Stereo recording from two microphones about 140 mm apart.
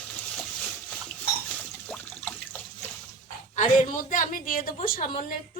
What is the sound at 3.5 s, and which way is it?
A woman's voice, 60° left (ahead or behind).